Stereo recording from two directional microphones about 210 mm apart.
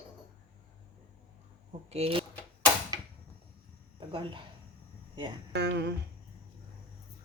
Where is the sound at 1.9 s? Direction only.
30° right (ahead or behind).